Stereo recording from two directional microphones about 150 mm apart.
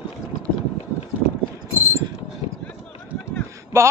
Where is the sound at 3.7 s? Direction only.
15° right (ahead or behind).